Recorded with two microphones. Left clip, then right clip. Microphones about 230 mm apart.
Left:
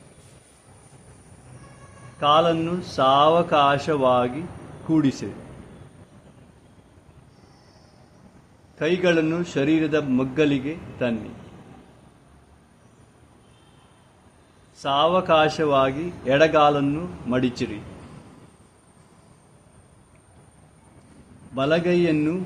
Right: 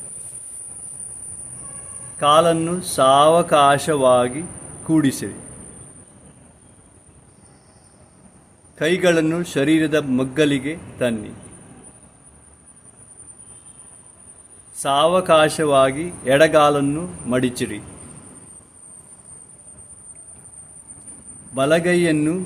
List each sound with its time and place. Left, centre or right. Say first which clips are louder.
2.1 s a man's voice: right 4 dB; right
8.8 s a man's voice: right 3 dB; centre
14.8 s a man's voice: right 3 dB; right
21.5 s a man's voice: right 4 dB; right